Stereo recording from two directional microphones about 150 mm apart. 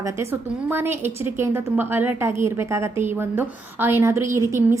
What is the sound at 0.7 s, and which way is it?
A woman's voice, 15° right (ahead or behind).